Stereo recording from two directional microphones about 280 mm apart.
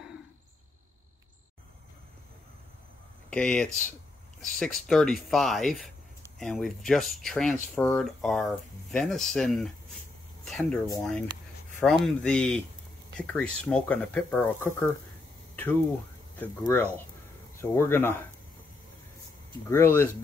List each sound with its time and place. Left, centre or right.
3.3 s speech: centre
16.3 s speech: centre
19.7 s speech: centre